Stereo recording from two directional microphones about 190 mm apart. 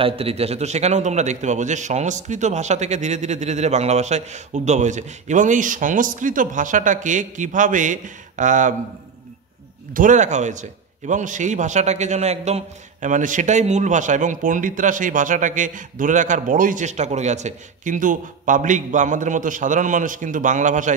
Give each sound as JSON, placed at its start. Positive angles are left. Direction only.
{"t": 0.0, "sound": "a man's voice", "side_deg": -30}
{"t": 9.9, "sound": "a man's voice", "side_deg": -40}